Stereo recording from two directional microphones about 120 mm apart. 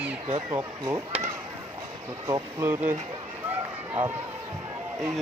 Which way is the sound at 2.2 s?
25° right (ahead or behind).